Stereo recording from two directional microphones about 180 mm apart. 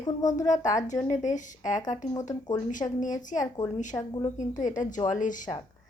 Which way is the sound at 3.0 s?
45° left (ahead or behind).